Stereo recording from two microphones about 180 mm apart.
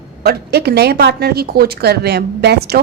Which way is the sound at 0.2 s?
60° right (ahead or behind).